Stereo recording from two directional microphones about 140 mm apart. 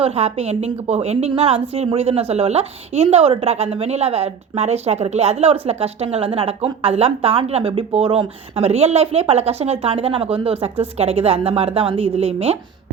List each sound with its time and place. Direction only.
0.0 s a woman's voice: 45° right (ahead or behind)